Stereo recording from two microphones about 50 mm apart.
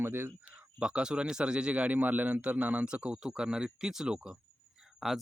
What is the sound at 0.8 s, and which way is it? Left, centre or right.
A man's voice, centre.